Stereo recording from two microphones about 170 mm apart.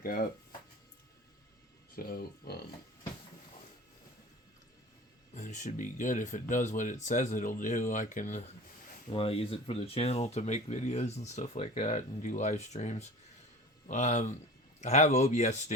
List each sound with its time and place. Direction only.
2.0 s speech: 65° left (ahead or behind)
5.3 s speech: 45° left (ahead or behind)
9.0 s speech: 35° left (ahead or behind)